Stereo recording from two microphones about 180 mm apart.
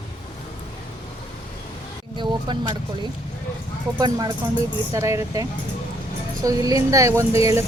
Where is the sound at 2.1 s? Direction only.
25° right (ahead or behind).